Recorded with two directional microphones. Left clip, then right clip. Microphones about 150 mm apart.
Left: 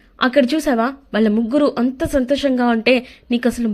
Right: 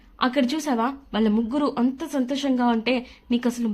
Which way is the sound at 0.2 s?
25° left (ahead or behind).